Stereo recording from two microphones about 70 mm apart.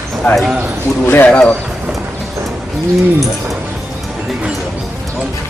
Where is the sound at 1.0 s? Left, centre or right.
Left.